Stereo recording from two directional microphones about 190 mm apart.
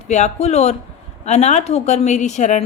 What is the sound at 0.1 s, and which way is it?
A woman's voice, 35° left (ahead or behind).